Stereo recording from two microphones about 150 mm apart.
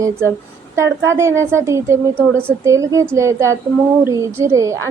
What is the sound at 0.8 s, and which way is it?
A woman's voice, 20° right (ahead or behind).